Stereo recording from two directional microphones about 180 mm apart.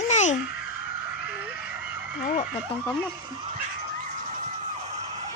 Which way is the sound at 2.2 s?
45° left (ahead or behind).